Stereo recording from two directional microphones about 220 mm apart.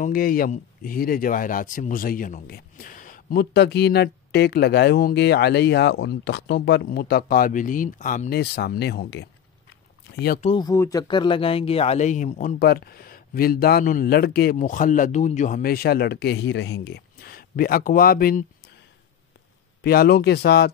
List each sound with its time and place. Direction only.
0.0 s speech: 40° left (ahead or behind)
10.4 s speech: 20° left (ahead or behind); by 18.4 s 40° left (ahead or behind)
19.8 s speech: 45° left (ahead or behind)